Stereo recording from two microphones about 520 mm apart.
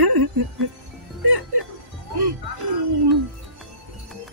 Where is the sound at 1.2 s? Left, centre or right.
Right.